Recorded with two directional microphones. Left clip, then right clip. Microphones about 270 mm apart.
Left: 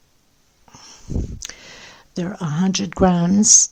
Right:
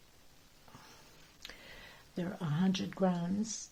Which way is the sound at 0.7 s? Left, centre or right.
Left.